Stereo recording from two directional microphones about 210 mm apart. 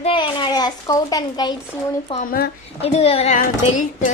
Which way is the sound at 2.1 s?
40° left (ahead or behind).